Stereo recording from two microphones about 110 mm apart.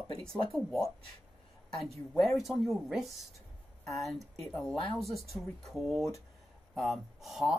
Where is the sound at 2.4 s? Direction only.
Centre (ahead or behind).